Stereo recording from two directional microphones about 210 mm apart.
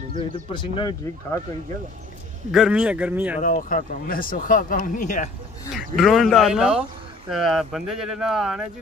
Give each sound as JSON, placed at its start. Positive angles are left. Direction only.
{"t": 0.1, "sound": "speech", "side_deg": 20}
{"t": 2.5, "sound": "speech", "side_deg": -5}
{"t": 3.3, "sound": "speech", "side_deg": 40}
{"t": 5.7, "sound": "speech", "side_deg": 0}